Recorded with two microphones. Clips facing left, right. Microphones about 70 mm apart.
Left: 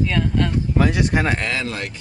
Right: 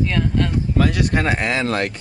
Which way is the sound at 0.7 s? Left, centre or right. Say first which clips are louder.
Even; centre.